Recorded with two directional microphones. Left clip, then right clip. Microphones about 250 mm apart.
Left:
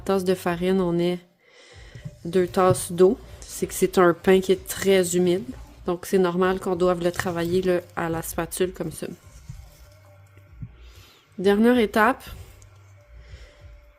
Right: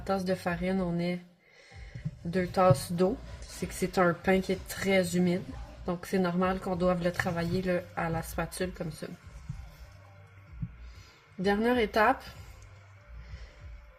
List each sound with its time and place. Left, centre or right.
0.0 s speech: left
2.3 s speech: left
11.4 s speech: left